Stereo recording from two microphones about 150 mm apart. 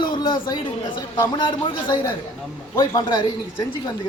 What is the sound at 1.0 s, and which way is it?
A man's voice, 30° left (ahead or behind).